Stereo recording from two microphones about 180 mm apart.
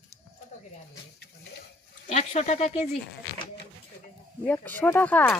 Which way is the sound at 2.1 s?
40° left (ahead or behind).